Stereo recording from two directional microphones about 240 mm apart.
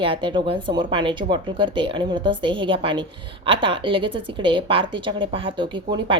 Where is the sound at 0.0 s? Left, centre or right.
Right.